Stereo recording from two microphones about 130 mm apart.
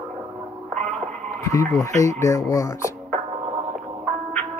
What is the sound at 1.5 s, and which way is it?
Speech, 25° left (ahead or behind).